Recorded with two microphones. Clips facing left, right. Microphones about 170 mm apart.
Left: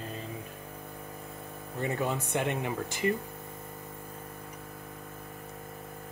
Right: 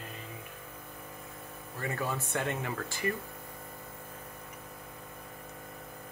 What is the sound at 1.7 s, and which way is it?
Speech, 20° left (ahead or behind).